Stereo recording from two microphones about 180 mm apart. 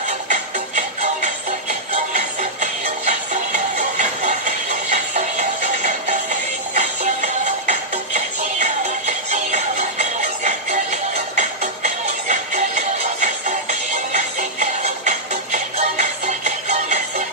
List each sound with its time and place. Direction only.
0.3 s music: 40° right (ahead or behind)